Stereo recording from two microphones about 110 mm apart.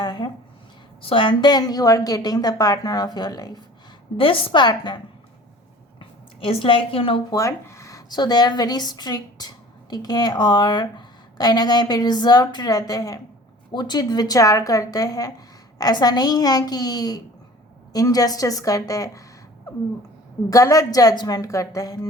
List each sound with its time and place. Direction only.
0.0 s a sound: 40° left (ahead or behind)
1.0 s a woman's voice: 50° left (ahead or behind)
4.2 s a woman's voice: 50° left (ahead or behind)
6.0 s a woman's voice: 55° left (ahead or behind)
7.3 s a woman's voice: 30° left (ahead or behind)
20.5 s a woman's voice: 30° left (ahead or behind)